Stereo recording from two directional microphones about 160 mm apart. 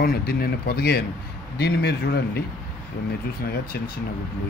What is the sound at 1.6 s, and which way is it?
Speech, 90° left.